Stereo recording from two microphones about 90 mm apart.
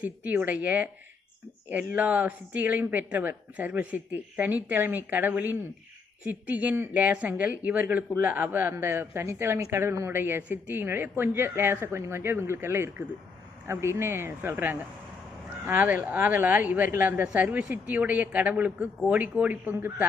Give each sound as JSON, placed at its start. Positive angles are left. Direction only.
{"t": 0.0, "sound": "a woman's voice", "side_deg": -15}